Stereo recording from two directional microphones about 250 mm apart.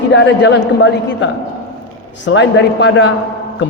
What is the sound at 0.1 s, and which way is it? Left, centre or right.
A man's voice, left.